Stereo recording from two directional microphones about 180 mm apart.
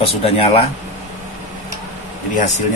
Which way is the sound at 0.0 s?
35° left (ahead or behind).